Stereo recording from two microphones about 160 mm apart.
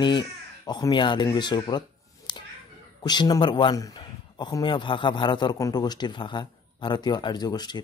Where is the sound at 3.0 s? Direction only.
25° left (ahead or behind).